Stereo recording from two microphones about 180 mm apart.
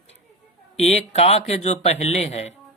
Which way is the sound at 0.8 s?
35° left (ahead or behind).